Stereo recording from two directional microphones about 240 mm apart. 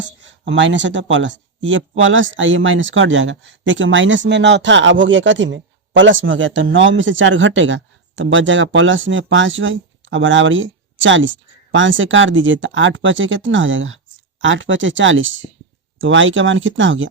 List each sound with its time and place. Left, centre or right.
0.0 s speech: right